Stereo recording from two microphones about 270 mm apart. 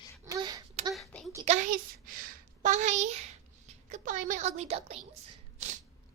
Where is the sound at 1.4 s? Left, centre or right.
Right.